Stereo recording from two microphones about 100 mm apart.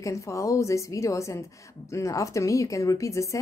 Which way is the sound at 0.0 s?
30° left (ahead or behind).